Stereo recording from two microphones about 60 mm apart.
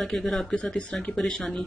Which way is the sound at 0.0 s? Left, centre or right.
Centre.